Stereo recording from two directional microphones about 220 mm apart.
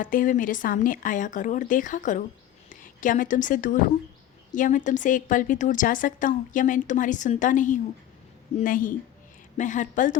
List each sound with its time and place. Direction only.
0.0 s a woman's voice: 40° left (ahead or behind)